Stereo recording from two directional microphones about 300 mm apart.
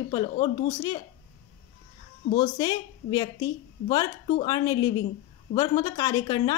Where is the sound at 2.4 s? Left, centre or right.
Centre.